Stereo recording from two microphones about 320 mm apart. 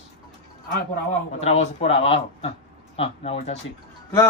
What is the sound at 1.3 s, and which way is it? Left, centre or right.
Speech, centre.